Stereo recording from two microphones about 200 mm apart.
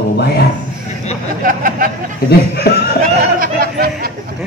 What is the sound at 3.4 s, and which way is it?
Speech, 45° right (ahead or behind).